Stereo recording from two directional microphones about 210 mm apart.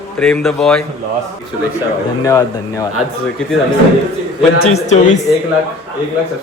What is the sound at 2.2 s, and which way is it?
Speech, 15° left (ahead or behind).